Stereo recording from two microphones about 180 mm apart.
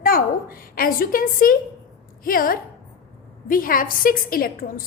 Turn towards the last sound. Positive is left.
turn(degrees=55)  # may be behind; listen again after turning